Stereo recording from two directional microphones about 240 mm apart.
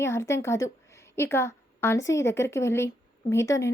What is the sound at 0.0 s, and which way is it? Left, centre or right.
A woman's voice, centre.